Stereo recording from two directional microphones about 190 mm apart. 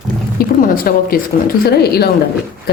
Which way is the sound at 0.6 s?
50° left (ahead or behind).